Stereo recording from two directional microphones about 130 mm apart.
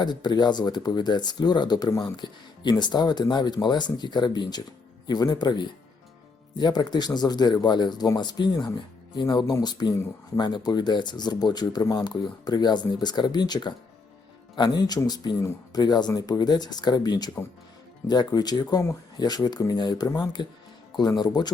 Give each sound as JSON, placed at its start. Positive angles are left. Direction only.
{"t": 0.0, "sound": "speech", "side_deg": 35}